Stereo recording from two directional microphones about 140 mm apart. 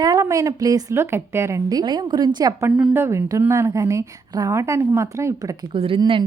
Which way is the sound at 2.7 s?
10° right (ahead or behind).